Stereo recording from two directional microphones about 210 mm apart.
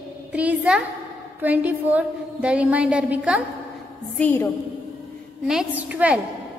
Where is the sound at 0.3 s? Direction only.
5° right (ahead or behind).